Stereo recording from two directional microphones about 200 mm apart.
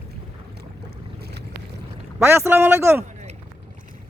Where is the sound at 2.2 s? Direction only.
10° right (ahead or behind).